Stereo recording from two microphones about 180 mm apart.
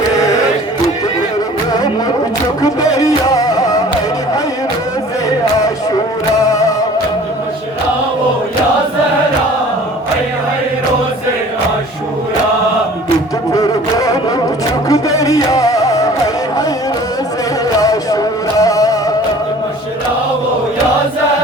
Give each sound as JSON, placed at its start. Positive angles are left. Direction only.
{"t": 2.6, "sound": "music", "side_deg": 20}
{"t": 13.5, "sound": "a sound", "side_deg": 20}
{"t": 17.7, "sound": "music", "side_deg": 20}